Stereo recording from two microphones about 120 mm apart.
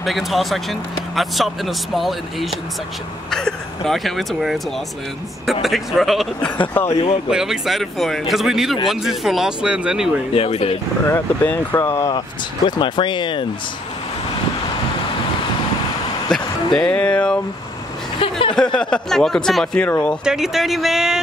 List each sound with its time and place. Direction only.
0.0 s speech: centre (ahead or behind)
3.3 s speech: 5° left (ahead or behind)
6.6 s speech: 15° left (ahead or behind)
7.2 s speech: 5° right (ahead or behind)
10.3 s speech: 55° left (ahead or behind)
11.1 s speech: 15° left (ahead or behind)
12.6 s speech: 40° left (ahead or behind)
16.3 s speech: 5° left (ahead or behind)
18.5 s speech: 5° left (ahead or behind)
20.2 s speech: 5° right (ahead or behind)